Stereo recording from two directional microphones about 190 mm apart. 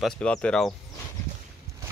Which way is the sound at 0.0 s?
5° left (ahead or behind).